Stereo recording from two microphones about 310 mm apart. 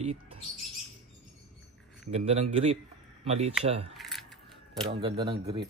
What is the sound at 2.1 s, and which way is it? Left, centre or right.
A man's voice, centre.